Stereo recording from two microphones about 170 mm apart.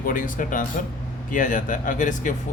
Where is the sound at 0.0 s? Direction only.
50° left (ahead or behind).